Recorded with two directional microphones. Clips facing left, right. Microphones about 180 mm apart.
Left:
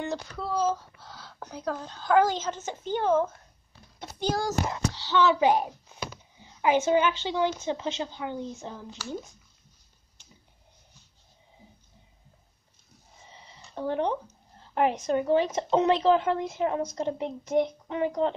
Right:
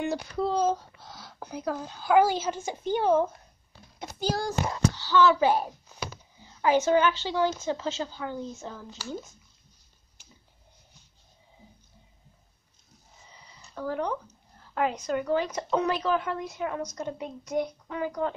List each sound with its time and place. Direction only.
0.0 s speech: 15° right (ahead or behind)
4.6 s a woman's voice: 20° left (ahead or behind)
13.2 s a sound: 25° left (ahead or behind)
14.6 s a woman's voice: 25° left (ahead or behind)